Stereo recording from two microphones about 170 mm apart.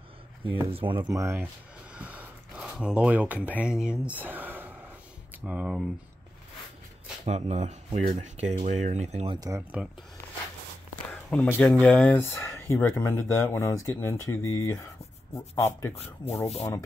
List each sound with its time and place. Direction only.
0.5 s speech: 30° right (ahead or behind)
1.1 s speech: 15° right (ahead or behind)
7.2 s speech: 40° right (ahead or behind)
9.3 s speech: 20° right (ahead or behind)
9.6 s speech: 10° right (ahead or behind)
11.1 s a sound: 10° left (ahead or behind)
11.8 s speech: 5° left (ahead or behind)
15.9 s speech: 35° left (ahead or behind)